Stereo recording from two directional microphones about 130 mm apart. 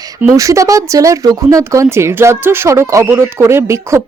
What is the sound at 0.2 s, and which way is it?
Speech, 20° right (ahead or behind).